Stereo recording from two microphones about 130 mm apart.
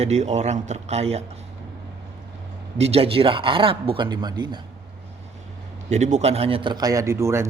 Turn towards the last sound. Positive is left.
turn(degrees=-20)  # may be behind; listen again after turning